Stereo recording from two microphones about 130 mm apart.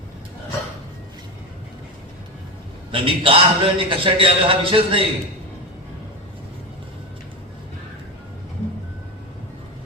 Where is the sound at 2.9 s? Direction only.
45° right (ahead or behind).